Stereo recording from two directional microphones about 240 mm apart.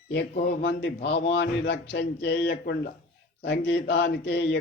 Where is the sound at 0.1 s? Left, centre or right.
Left.